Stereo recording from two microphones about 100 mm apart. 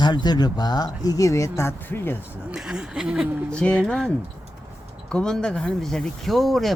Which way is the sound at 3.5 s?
10° left (ahead or behind).